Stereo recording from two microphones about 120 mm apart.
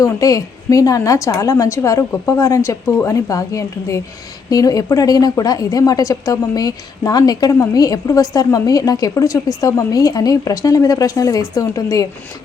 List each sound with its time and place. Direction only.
0.0 s a woman's voice: 30° left (ahead or behind)